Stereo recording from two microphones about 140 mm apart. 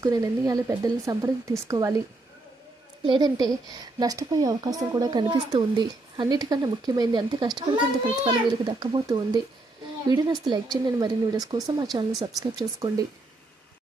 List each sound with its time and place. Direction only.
0.0 s a woman's voice: 25° right (ahead or behind)
3.1 s a woman's voice: 30° right (ahead or behind)